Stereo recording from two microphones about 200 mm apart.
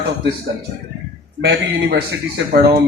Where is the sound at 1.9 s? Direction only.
60° right (ahead or behind).